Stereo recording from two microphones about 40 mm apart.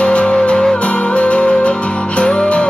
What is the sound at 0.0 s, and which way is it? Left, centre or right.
Music, left.